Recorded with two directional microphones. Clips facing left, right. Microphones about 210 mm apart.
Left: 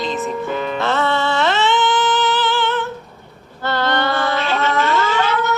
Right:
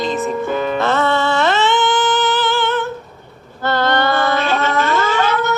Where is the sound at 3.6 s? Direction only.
50° right (ahead or behind).